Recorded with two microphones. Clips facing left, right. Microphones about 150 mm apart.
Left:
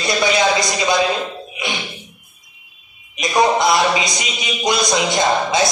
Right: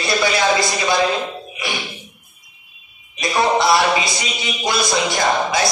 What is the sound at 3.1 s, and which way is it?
A man's voice, 20° left (ahead or behind).